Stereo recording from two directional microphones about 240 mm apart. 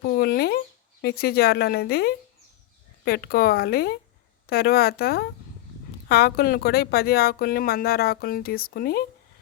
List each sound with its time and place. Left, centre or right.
0.0 s speech: left